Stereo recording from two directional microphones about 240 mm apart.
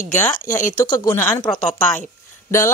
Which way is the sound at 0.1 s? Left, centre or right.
Centre.